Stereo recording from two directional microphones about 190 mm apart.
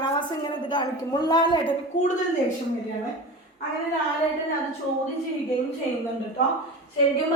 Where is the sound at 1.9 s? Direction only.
40° left (ahead or behind).